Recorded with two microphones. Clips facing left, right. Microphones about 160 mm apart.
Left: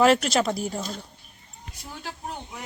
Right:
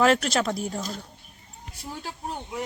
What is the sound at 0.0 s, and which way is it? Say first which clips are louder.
Speech: left 2 dB; centre (ahead or behind).